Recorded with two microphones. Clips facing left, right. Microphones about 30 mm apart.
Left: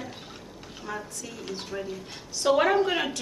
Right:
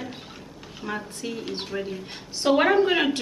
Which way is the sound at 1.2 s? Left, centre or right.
Right.